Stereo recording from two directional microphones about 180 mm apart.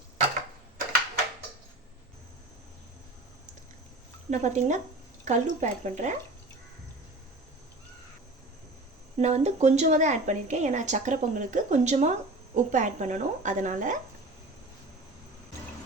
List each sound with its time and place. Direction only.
4.3 s speech: 40° right (ahead or behind)
9.1 s speech: 40° right (ahead or behind)